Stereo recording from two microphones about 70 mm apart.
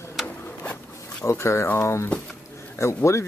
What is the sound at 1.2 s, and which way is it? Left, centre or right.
Speech, left.